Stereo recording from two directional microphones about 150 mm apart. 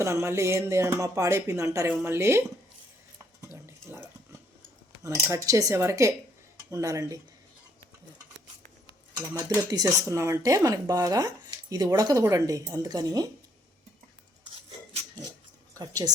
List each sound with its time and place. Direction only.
0.0 s speech: 20° right (ahead or behind)
3.5 s a sound: 15° right (ahead or behind)
5.0 s speech: 20° right (ahead or behind)
9.1 s speech: 25° right (ahead or behind)
15.8 s speech: 25° right (ahead or behind)